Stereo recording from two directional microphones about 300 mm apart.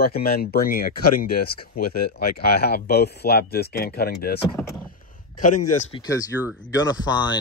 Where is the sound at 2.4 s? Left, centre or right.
Left.